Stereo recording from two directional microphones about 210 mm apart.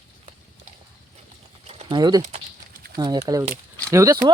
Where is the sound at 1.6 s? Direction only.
25° right (ahead or behind).